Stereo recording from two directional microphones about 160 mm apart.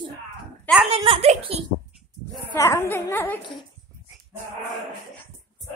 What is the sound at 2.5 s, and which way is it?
Speech, 15° left (ahead or behind).